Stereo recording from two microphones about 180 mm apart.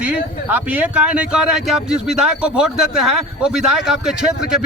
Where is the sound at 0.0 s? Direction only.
10° right (ahead or behind).